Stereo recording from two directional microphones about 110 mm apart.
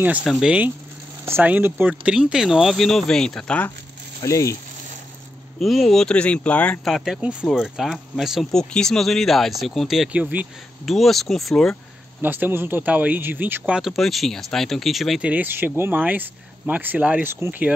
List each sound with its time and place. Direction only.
0.0 s speech: 15° right (ahead or behind)
1.2 s speech: 20° right (ahead or behind); by 3.7 s 10° left (ahead or behind)
4.2 s speech: 30° left (ahead or behind)
5.6 s speech: centre (ahead or behind)
6.8 s speech: centre (ahead or behind)
10.1 s speech: 15° right (ahead or behind)
10.9 s speech: centre (ahead or behind)
12.2 s speech: 20° right (ahead or behind); by 15.2 s centre (ahead or behind)
15.2 s speech: 15° right (ahead or behind)